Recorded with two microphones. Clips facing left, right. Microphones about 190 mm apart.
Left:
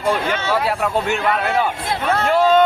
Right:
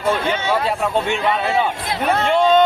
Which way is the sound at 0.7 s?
5° left (ahead or behind).